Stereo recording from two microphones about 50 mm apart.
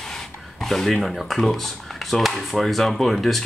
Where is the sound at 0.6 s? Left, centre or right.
Centre.